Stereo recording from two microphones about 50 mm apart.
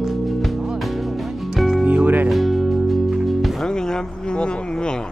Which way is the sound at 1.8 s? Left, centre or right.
Right.